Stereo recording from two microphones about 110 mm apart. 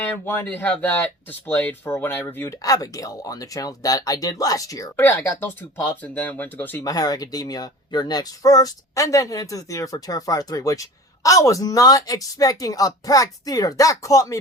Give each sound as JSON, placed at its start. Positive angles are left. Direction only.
{"t": 0.4, "sound": "speech", "side_deg": 15}
{"t": 4.9, "sound": "speech", "side_deg": 20}
{"t": 6.8, "sound": "speech", "side_deg": 35}